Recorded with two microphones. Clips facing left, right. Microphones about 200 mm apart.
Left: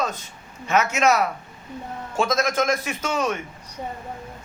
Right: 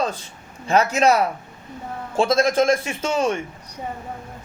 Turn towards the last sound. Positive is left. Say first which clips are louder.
# right 3 dB
turn(degrees=-30)  # may be behind; listen again after turning